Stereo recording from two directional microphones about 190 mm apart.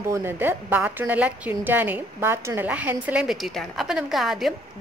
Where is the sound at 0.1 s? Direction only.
10° right (ahead or behind).